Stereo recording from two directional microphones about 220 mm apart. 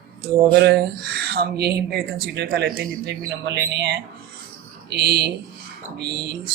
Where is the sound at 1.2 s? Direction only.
45° right (ahead or behind).